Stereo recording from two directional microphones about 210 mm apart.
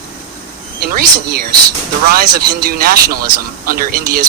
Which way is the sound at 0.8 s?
45° right (ahead or behind).